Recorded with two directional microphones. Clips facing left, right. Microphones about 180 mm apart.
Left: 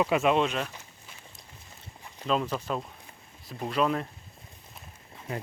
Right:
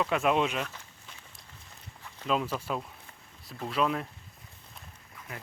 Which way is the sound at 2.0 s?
15° left (ahead or behind).